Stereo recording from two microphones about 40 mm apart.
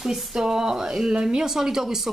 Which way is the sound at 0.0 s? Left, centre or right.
Centre.